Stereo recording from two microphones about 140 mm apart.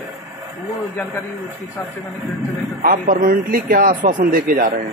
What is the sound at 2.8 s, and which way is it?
A man's voice, 80° right.